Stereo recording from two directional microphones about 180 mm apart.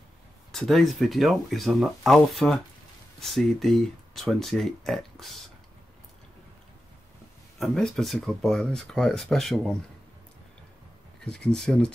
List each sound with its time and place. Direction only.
0.5 s speech: centre (ahead or behind)
7.5 s speech: centre (ahead or behind)
11.1 s speech: 5° left (ahead or behind)